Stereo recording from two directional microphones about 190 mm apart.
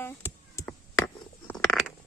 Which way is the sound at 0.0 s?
10° left (ahead or behind).